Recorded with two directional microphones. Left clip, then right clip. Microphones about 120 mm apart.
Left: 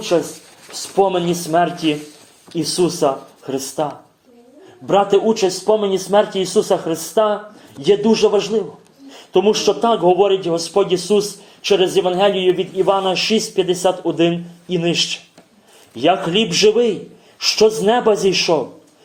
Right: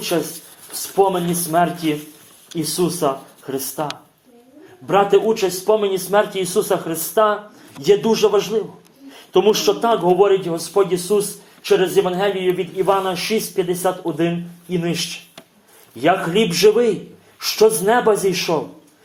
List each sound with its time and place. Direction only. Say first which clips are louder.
0.1 s speech: left 5 dB; 5° left (ahead or behind)
0.9 s speech: left 1 dB; 20° left (ahead or behind)
4.9 s speech: left 1 dB; 20° left (ahead or behind)